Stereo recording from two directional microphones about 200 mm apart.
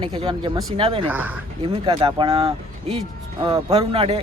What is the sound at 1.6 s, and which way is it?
A man's voice, 30° right (ahead or behind).